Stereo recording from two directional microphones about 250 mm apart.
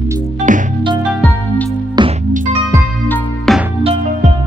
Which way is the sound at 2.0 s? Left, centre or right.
Centre.